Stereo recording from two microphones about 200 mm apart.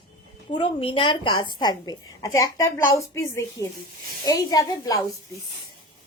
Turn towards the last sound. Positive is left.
turn(degrees=20)  # may be behind; listen again after turning